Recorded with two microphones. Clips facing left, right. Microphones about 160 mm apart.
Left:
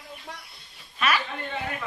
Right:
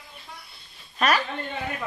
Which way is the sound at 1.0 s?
40° right (ahead or behind).